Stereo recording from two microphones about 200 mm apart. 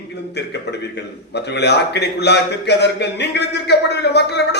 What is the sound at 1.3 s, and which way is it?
A man's voice, 55° left (ahead or behind).